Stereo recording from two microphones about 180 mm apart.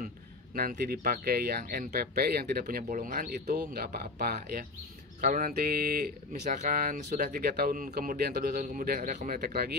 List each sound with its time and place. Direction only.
0.6 s speech: 55° right (ahead or behind)
8.5 s speech: 50° right (ahead or behind)
9.3 s speech: 60° right (ahead or behind)